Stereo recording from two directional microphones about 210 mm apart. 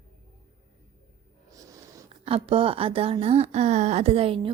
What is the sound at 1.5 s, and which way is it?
Snort, 15° right (ahead or behind).